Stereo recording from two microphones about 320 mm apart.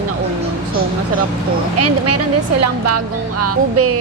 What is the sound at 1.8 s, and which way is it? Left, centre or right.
A woman's voice, right.